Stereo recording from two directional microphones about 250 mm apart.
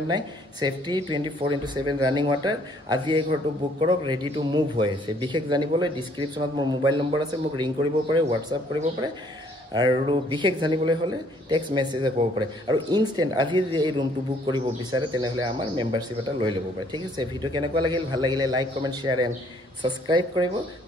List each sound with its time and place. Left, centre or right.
0.1 s a man's voice: centre
9.8 s speech: centre